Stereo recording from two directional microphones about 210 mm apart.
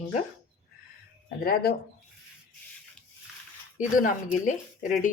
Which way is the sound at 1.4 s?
45° left (ahead or behind).